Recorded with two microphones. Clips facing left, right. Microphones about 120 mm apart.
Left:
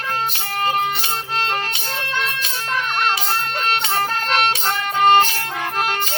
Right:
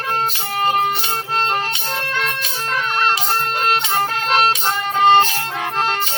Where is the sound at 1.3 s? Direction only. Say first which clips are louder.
Right 3 dB; 40° right (ahead or behind).